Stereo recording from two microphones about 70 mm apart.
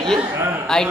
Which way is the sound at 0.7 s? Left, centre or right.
Centre.